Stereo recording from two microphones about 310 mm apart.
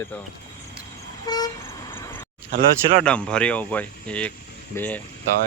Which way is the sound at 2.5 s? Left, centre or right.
Right.